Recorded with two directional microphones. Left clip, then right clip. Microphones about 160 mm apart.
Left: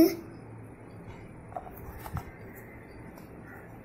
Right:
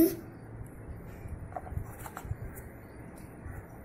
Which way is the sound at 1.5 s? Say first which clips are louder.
Left 1 dB; 20° right (ahead or behind).